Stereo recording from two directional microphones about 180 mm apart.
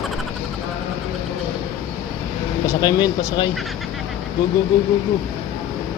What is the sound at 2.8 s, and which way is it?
Speech, 20° left (ahead or behind).